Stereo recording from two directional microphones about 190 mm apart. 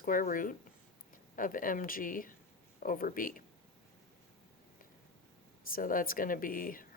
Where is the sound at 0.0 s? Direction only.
45° left (ahead or behind).